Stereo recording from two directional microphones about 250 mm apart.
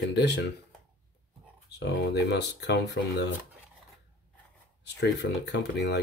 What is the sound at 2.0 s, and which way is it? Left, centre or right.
Speech, left.